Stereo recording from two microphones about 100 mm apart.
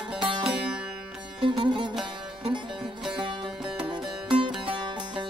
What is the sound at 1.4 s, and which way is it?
Sitar, 50° right (ahead or behind).